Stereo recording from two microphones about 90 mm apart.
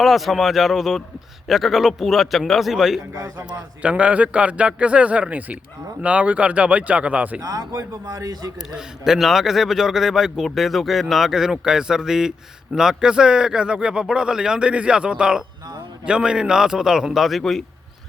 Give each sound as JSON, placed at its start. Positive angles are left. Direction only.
{"t": 0.0, "sound": "a man's voice", "side_deg": 0}
{"t": 7.4, "sound": "a man's voice", "side_deg": -45}
{"t": 8.7, "sound": "a man's voice", "side_deg": -5}